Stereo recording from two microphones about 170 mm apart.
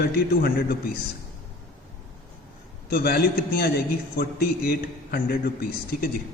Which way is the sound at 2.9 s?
60° left (ahead or behind).